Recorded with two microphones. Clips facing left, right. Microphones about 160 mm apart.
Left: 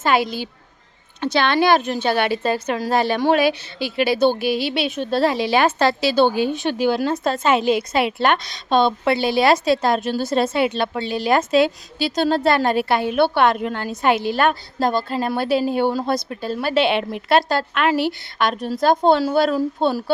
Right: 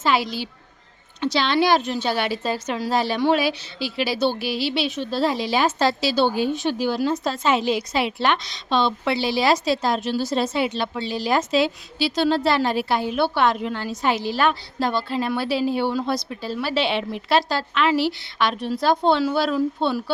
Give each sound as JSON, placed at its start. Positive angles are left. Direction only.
{"t": 0.0, "sound": "a woman's voice", "side_deg": 50}